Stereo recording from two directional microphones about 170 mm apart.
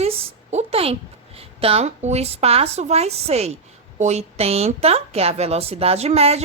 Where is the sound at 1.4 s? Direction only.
35° right (ahead or behind).